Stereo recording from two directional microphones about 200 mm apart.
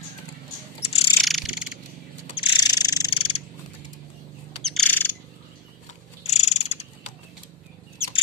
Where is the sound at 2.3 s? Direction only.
20° left (ahead or behind).